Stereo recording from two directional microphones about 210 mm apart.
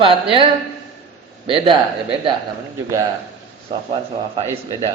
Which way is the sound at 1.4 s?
25° right (ahead or behind).